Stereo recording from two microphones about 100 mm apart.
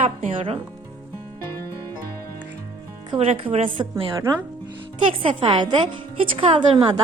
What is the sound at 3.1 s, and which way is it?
Speech, 75° right (ahead or behind).